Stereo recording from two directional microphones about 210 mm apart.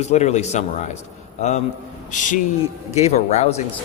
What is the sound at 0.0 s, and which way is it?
Speech, 30° left (ahead or behind).